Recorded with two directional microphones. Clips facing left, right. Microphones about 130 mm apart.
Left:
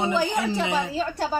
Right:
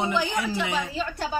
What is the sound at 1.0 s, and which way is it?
Speech, 40° left (ahead or behind).